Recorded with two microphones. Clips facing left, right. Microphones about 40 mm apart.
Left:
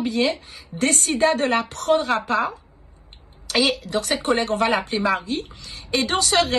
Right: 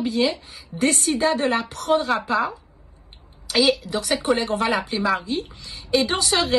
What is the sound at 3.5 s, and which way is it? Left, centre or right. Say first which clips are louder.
A woman's voice: right 2 dB; left.